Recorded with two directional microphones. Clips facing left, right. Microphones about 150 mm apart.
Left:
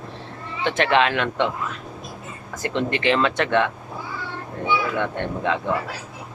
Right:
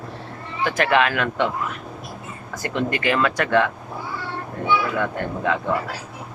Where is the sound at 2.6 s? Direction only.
25° left (ahead or behind).